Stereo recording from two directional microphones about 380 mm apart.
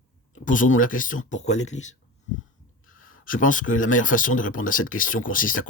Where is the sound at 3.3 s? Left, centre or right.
Left.